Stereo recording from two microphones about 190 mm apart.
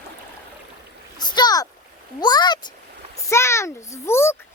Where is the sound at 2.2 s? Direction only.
20° left (ahead or behind).